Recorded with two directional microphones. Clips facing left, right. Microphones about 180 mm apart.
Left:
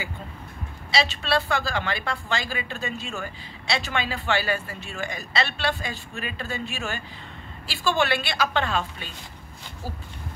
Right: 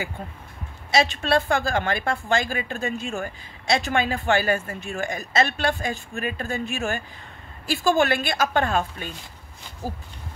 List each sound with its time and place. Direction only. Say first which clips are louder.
0.9 s a woman's voice: right 3 dB; 50° right (ahead or behind)